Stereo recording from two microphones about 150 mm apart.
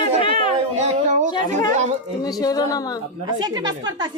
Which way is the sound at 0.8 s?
55° right (ahead or behind).